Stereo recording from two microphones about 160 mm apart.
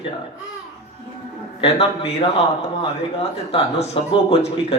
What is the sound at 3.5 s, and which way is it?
A man's voice, 40° left (ahead or behind).